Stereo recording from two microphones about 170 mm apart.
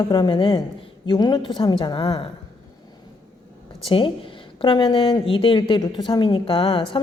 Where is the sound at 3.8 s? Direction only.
30° left (ahead or behind).